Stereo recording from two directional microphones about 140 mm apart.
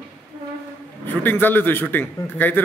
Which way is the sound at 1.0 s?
15° left (ahead or behind).